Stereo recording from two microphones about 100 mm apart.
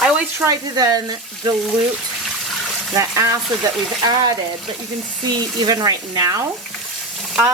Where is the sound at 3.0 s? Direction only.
30° right (ahead or behind).